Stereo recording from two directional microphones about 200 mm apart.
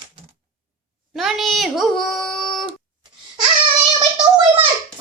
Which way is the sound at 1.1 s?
Centre (ahead or behind).